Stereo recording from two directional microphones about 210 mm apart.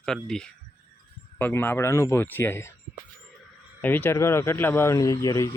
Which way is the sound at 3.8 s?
10° left (ahead or behind).